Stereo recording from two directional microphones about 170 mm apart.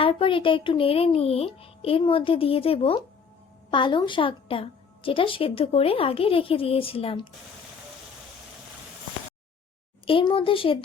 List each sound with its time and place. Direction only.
0.0 s a woman's voice: 30° left (ahead or behind)
10.1 s a woman's voice: 30° left (ahead or behind)